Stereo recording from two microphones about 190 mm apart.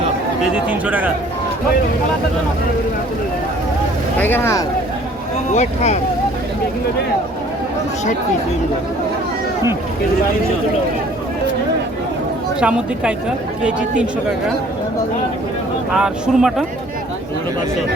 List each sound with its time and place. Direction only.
0.5 s speech: 10° right (ahead or behind)
4.2 s speech: 10° left (ahead or behind)
5.5 s speech: 35° left (ahead or behind)
12.5 s speech: 5° right (ahead or behind)
16.0 s speech: 5° right (ahead or behind)